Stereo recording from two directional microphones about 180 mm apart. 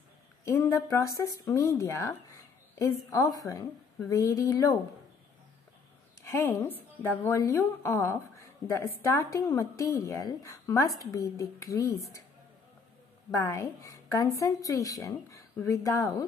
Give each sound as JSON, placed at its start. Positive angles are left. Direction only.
{"t": 0.5, "sound": "a woman's voice", "side_deg": 15}
{"t": 6.3, "sound": "a woman's voice", "side_deg": 10}
{"t": 13.3, "sound": "a woman's voice", "side_deg": 15}